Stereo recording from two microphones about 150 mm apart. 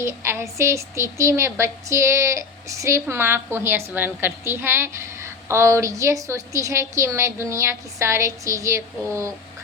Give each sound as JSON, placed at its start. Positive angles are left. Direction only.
{"t": 0.0, "sound": "speech", "side_deg": -20}